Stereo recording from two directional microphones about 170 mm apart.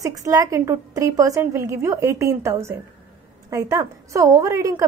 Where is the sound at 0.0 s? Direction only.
20° right (ahead or behind).